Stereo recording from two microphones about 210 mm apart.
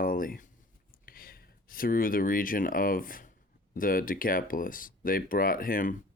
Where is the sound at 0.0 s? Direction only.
40° left (ahead or behind).